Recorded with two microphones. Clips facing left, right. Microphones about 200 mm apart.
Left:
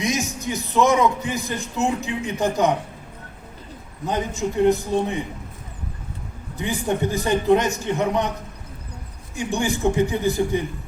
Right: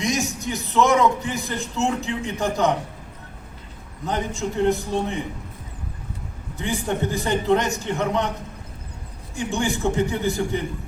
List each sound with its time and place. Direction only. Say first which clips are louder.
0.0 s a man's voice: even; 20° left (ahead or behind)
4.0 s a man's voice: left 2 dB; 15° left (ahead or behind)
6.6 s a man's voice: left 2 dB; 15° left (ahead or behind)
9.3 s a man's voice: left 1 dB; 15° left (ahead or behind)